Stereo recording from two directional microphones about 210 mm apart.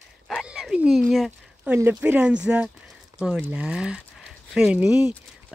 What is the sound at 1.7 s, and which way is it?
Speech, 10° right (ahead or behind).